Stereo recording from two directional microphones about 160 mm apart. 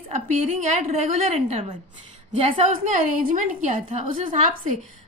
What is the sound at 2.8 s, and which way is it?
A woman's voice, 55° right (ahead or behind).